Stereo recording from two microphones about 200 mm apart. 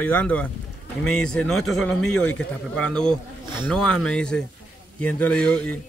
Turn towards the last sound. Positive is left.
turn(degrees=5)  # may be behind; listen again after turning